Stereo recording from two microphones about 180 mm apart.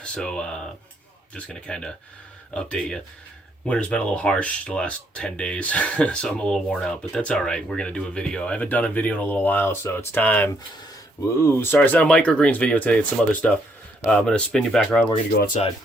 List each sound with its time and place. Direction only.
0.0 s speech: 5° left (ahead or behind)
11.6 s speech: 10° left (ahead or behind)